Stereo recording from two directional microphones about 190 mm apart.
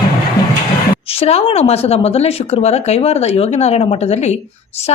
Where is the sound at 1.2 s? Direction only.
30° left (ahead or behind).